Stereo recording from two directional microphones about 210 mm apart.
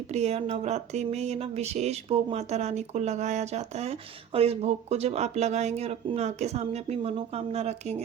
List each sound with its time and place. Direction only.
0.1 s speech: 30° right (ahead or behind)